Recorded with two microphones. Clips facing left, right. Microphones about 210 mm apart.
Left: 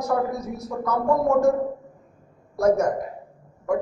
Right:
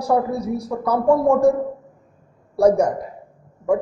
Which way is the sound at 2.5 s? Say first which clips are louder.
Right 4 dB; 30° right (ahead or behind).